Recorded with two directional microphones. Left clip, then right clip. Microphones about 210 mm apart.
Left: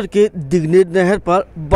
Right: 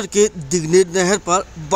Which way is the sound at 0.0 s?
10° left (ahead or behind).